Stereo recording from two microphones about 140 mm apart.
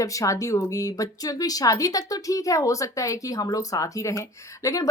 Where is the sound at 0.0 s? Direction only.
25° left (ahead or behind).